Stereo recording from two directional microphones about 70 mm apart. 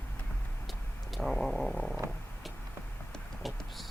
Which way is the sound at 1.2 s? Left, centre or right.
Centre.